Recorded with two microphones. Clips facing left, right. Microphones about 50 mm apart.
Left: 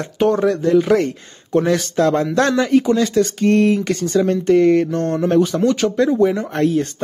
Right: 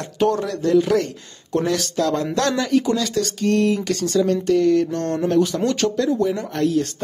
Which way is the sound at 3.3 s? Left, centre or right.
Left.